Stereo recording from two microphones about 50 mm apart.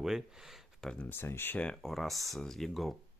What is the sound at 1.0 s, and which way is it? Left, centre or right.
Speech, left.